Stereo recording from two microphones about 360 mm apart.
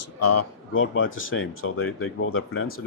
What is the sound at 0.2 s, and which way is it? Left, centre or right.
Speech, left.